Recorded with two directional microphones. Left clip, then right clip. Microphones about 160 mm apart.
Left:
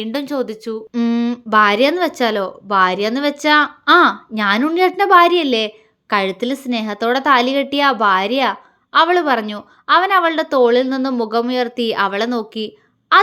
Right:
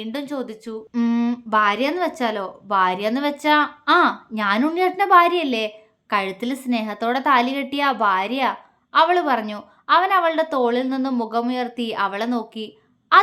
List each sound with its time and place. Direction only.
0.0 s a woman's voice: 30° left (ahead or behind)
1.5 s a woman's voice: 30° left (ahead or behind)